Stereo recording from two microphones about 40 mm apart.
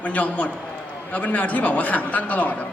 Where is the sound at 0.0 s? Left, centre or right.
Left.